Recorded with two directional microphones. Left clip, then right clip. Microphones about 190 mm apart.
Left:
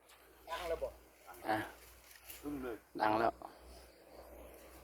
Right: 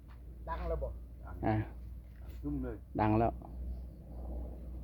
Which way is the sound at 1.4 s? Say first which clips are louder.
Right 2 dB; centre (ahead or behind).